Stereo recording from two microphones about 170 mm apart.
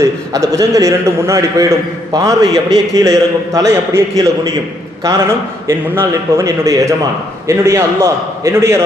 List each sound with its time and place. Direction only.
0.0 s a man's voice: 20° right (ahead or behind)
5.9 s a man's voice: 15° right (ahead or behind)